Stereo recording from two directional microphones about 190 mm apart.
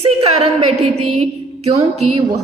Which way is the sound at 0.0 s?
30° right (ahead or behind).